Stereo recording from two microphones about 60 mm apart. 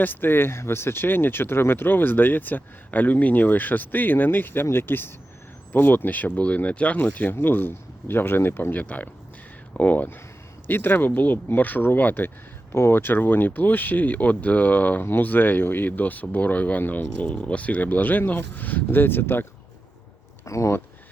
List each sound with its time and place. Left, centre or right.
0.0 s speech: left
8.8 s speech: left
12.7 s speech: left
20.4 s speech: left